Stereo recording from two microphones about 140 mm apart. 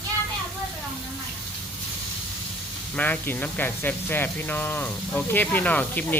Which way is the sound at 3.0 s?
10° left (ahead or behind).